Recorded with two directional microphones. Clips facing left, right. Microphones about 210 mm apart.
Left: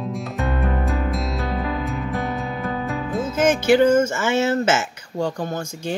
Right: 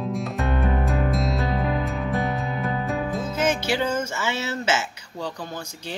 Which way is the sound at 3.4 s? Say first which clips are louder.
Left 9 dB; 50° left (ahead or behind).